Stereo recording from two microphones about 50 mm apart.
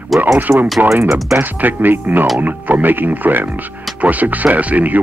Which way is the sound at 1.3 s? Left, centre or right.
Right.